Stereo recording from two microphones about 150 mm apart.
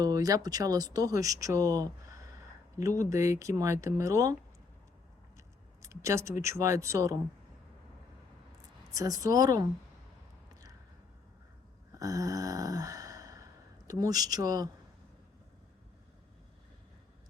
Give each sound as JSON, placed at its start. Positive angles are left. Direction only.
{"t": 0.0, "sound": "speech", "side_deg": -25}
{"t": 5.8, "sound": "speech", "side_deg": -20}
{"t": 8.9, "sound": "speech", "side_deg": -25}
{"t": 11.9, "sound": "a sound", "side_deg": -25}